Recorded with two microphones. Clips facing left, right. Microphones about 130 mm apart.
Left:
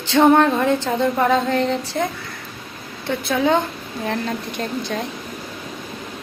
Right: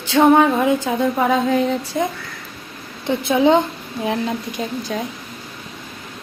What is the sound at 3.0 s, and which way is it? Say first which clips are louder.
A woman's voice: right 4 dB; 20° right (ahead or behind).